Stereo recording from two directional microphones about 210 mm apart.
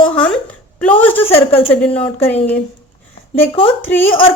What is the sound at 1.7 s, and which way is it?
Speech, 5° left (ahead or behind).